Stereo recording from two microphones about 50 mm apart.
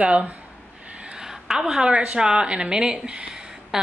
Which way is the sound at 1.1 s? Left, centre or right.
Centre.